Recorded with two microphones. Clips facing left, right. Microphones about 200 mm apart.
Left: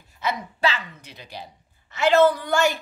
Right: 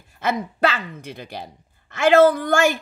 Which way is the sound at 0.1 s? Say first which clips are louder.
Right 4 dB; 50° right (ahead or behind).